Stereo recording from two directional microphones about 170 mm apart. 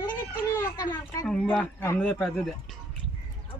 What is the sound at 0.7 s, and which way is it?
Speech, 25° left (ahead or behind).